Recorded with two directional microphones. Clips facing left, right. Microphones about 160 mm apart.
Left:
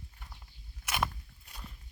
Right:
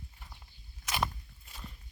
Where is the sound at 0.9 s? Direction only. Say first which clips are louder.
Even; 10° left (ahead or behind).